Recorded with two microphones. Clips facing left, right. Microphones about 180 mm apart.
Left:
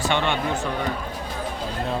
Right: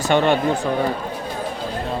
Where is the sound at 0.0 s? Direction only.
40° right (ahead or behind).